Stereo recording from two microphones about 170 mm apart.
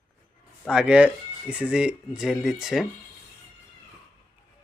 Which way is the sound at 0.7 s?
5° right (ahead or behind).